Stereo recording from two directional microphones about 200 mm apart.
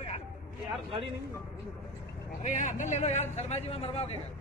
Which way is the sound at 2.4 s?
35° left (ahead or behind).